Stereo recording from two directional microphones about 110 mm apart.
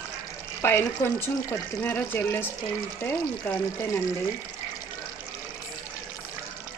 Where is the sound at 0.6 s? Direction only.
20° left (ahead or behind).